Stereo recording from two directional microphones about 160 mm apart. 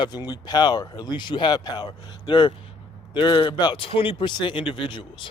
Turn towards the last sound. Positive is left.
turn(degrees=30)  # may be behind; listen again after turning